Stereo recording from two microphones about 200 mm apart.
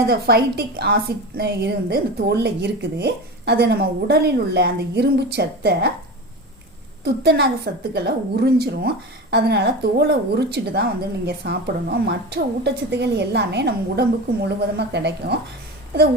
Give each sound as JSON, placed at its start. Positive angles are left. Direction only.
{"t": 0.0, "sound": "a woman's voice", "side_deg": -55}
{"t": 7.0, "sound": "a woman's voice", "side_deg": -55}